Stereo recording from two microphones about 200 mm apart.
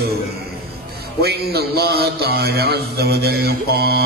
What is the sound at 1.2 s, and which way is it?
A man's voice, 50° right (ahead or behind).